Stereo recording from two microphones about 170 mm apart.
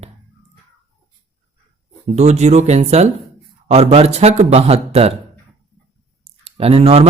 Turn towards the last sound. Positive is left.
turn(degrees=-35)  # may be behind; listen again after turning